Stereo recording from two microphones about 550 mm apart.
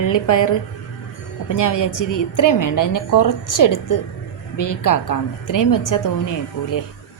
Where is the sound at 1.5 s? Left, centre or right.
Left.